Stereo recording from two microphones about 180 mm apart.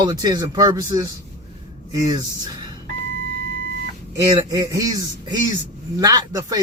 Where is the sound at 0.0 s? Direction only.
20° right (ahead or behind).